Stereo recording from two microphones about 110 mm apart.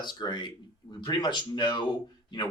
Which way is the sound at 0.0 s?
45° left (ahead or behind).